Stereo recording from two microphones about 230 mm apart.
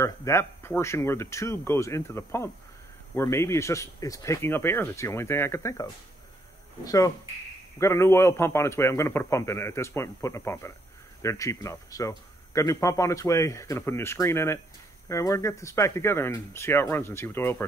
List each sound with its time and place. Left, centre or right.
0.0 s speech: centre